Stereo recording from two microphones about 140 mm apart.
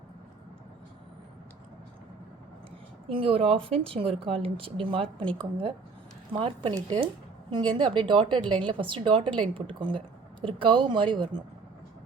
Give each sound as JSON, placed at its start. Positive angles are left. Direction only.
{"t": 3.1, "sound": "a woman's voice", "side_deg": -40}
{"t": 6.3, "sound": "a woman's voice", "side_deg": -35}